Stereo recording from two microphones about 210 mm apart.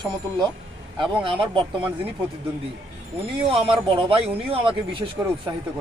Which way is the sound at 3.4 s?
25° right (ahead or behind).